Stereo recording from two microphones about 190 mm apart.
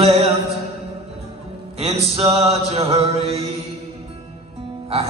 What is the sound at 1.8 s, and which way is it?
Mantra, 30° right (ahead or behind).